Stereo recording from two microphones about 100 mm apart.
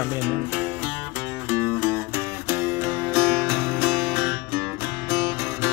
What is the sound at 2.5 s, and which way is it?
Music, 5° right (ahead or behind).